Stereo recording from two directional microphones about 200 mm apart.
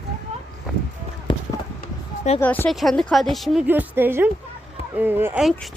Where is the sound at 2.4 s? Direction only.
10° left (ahead or behind).